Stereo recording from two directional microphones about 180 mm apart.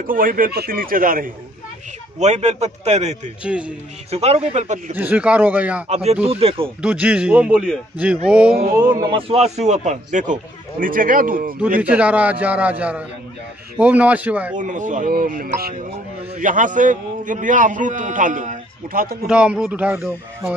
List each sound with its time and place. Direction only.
0.0 s a man's voice: 50° right (ahead or behind)
2.1 s speech: 40° right (ahead or behind)
3.4 s a man's voice: 5° right (ahead or behind)
4.1 s speech: 35° right (ahead or behind)
4.9 s a man's voice: 10° right (ahead or behind)
5.9 s speech: 35° right (ahead or behind)
6.8 s a man's voice: 5° right (ahead or behind)
8.7 s speech: 20° right (ahead or behind)
9.3 s a man's voice: 35° right (ahead or behind); by 11.5 s 50° right (ahead or behind)
11.8 s a man's voice: 5° right (ahead or behind)
14.6 s a man's voice: 45° right (ahead or behind)
19.2 s speech: 5° right (ahead or behind)